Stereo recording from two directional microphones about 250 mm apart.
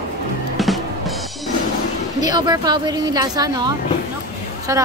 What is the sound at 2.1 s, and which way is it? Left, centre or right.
Speech, centre.